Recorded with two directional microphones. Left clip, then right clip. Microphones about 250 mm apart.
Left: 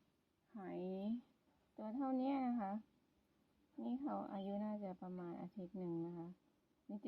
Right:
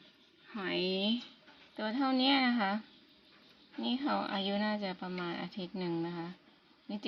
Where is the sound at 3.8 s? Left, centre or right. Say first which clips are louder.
Right 12 dB; centre.